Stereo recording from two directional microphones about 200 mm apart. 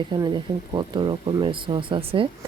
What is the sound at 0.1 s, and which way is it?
Speech, 20° right (ahead or behind).